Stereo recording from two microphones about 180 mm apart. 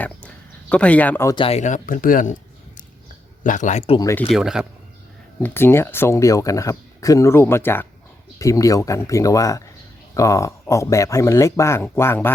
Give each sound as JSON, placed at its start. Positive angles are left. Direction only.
{"t": 0.7, "sound": "speech", "side_deg": 5}
{"t": 1.4, "sound": "speech", "side_deg": 35}
{"t": 3.4, "sound": "speech", "side_deg": 45}
{"t": 3.9, "sound": "speech", "side_deg": 20}
{"t": 4.3, "sound": "speech", "side_deg": 0}
{"t": 5.4, "sound": "speech", "side_deg": 10}